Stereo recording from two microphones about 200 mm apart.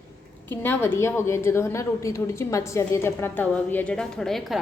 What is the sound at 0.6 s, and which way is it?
A woman's voice, 10° left (ahead or behind).